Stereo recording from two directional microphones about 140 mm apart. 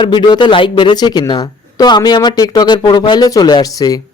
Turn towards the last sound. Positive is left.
turn(degrees=25)  # may be behind; listen again after turning